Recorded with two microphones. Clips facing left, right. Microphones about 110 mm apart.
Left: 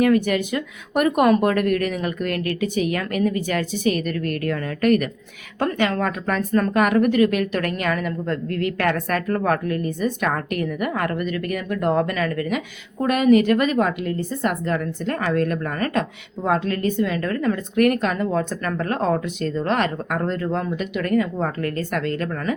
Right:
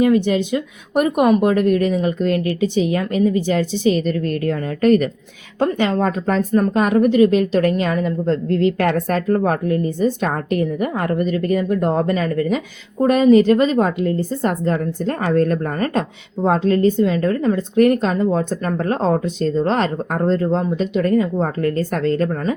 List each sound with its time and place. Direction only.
0.0 s a woman's voice: 25° right (ahead or behind)